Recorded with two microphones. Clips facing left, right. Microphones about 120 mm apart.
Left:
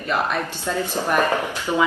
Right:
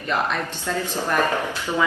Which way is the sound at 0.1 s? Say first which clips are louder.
Left 1 dB; 10° left (ahead or behind).